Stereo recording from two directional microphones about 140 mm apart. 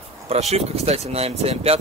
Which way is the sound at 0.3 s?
50° right (ahead or behind).